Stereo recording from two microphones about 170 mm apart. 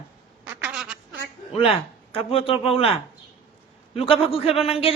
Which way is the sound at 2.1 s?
35° left (ahead or behind).